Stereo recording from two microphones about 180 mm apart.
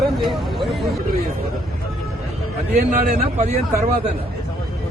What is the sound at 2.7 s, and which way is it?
Speech, 45° right (ahead or behind).